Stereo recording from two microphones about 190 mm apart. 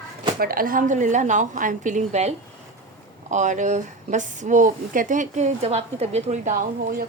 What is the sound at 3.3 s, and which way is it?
Speech, 40° right (ahead or behind).